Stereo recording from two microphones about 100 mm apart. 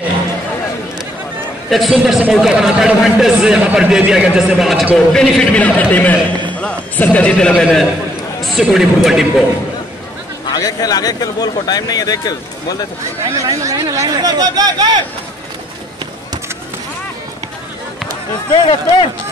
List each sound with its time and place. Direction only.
1.7 s a man's voice: centre (ahead or behind)
7.5 s a man's voice: centre (ahead or behind)
10.5 s a man's voice: 40° left (ahead or behind)
13.3 s speech: 35° right (ahead or behind)
18.5 s speech: 50° left (ahead or behind)